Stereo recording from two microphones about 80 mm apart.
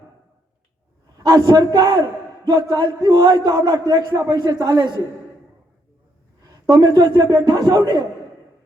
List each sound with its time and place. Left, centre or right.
1.1 s a man's voice: right
6.4 s a sound: right
6.8 s a man's voice: right